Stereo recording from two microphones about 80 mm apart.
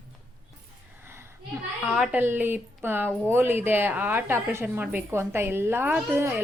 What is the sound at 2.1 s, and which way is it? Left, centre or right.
Speech, right.